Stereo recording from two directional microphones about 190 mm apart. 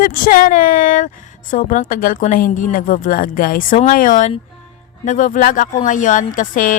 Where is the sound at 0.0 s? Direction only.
50° left (ahead or behind).